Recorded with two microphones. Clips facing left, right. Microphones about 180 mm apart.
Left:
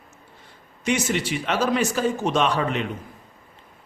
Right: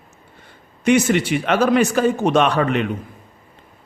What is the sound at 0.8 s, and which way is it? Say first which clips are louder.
Speech: right 8 dB; 60° right (ahead or behind).